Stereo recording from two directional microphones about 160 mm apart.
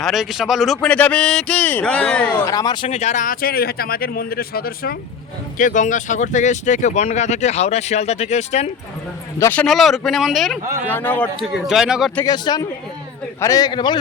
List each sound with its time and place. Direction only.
0.0 s speech: centre (ahead or behind)
2.5 s speech: 25° left (ahead or behind); by 4.9 s 70° left (ahead or behind)
5.5 s speech: 55° left (ahead or behind)
9.4 s speech: 10° left (ahead or behind)
10.9 s speech: 10° left (ahead or behind)
11.3 s speech: centre (ahead or behind)
12.2 s a man's voice: 25° left (ahead or behind)